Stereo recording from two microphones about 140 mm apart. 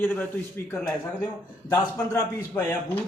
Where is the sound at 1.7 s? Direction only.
25° left (ahead or behind).